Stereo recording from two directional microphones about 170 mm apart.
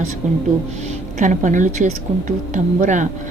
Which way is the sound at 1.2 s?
50° right (ahead or behind).